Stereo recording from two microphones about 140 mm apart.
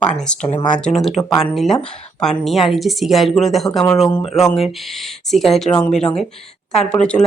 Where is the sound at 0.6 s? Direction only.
30° left (ahead or behind).